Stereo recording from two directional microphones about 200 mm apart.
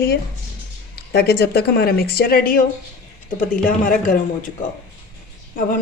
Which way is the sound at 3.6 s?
45° left (ahead or behind).